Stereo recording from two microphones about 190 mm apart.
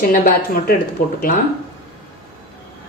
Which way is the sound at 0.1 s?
50° left (ahead or behind).